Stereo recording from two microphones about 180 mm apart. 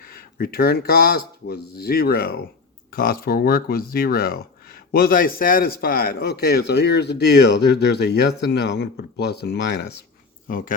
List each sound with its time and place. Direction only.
0.1 s speech: 60° left (ahead or behind)
10.5 s speech: 50° left (ahead or behind)